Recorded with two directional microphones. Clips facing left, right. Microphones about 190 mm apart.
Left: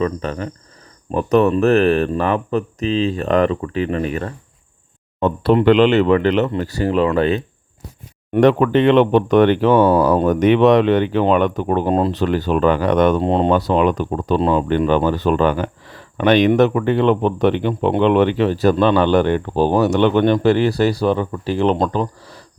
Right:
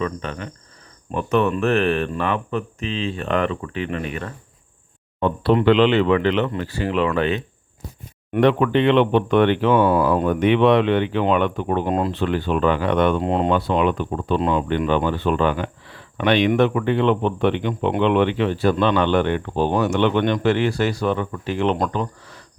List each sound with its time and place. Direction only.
0.0 s speech: 35° left (ahead or behind)